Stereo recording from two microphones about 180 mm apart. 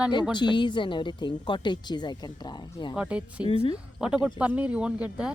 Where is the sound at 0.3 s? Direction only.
25° left (ahead or behind).